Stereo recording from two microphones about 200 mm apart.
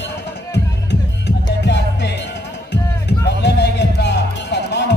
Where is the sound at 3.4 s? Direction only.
60° left (ahead or behind).